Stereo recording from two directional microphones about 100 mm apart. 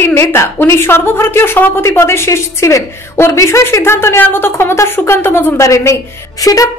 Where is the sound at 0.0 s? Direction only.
25° left (ahead or behind).